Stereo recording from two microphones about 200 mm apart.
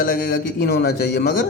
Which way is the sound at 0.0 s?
45° left (ahead or behind).